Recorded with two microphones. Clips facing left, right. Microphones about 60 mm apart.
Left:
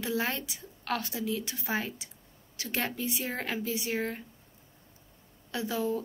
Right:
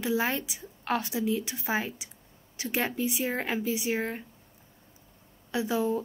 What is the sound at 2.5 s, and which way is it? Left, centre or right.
Speech, centre.